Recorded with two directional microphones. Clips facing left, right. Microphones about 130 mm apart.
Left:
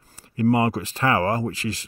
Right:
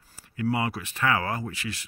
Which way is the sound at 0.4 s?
40° left (ahead or behind).